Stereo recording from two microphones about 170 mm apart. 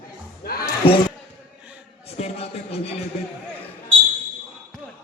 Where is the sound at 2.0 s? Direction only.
35° left (ahead or behind).